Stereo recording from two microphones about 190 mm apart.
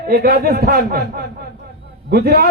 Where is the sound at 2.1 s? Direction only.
55° right (ahead or behind).